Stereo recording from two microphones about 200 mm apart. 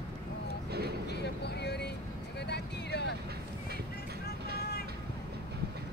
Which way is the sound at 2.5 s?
55° left (ahead or behind).